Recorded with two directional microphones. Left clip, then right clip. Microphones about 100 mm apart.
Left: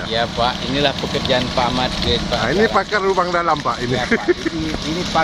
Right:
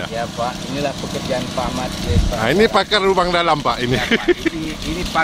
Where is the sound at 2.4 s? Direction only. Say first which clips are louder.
Right 4 dB; 30° right (ahead or behind).